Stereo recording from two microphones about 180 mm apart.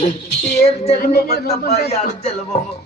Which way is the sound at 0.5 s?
35° left (ahead or behind).